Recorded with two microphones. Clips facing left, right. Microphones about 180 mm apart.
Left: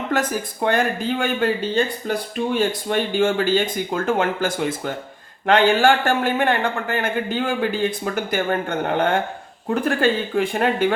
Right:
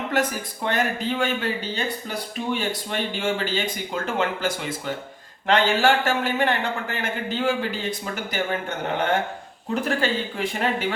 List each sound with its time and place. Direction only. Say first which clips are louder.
0.1 s a man's voice: left 3 dB; 50° left (ahead or behind)
9.6 s a man's voice: left 5 dB; 55° left (ahead or behind)